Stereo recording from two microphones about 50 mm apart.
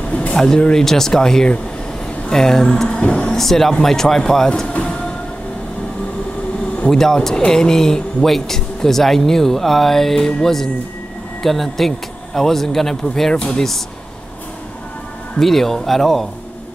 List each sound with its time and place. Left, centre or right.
0.3 s a man's voice: centre
2.9 s speech: left
3.3 s a man's voice: centre
4.7 s train: centre
6.9 s a man's voice: centre
15.3 s a man's voice: centre